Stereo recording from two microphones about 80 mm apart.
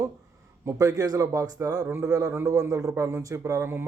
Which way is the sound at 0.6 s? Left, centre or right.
Right.